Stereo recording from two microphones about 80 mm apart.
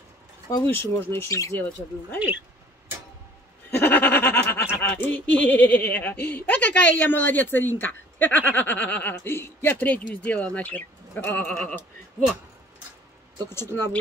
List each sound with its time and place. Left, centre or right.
0.7 s speech: left
1.3 s speech: left
2.1 s speech: centre
3.7 s speech: left
9.1 s speech: left
13.5 s speech: left